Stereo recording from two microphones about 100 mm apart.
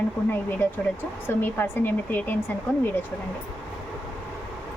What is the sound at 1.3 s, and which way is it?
Speech, 20° left (ahead or behind).